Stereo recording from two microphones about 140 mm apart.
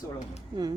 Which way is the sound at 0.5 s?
30° right (ahead or behind).